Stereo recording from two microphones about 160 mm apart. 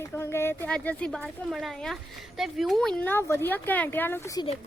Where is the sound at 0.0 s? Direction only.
15° left (ahead or behind).